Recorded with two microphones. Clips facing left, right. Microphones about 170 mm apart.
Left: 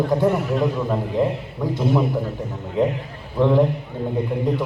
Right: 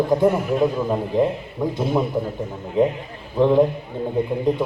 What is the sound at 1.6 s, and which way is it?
Speech, 15° right (ahead or behind).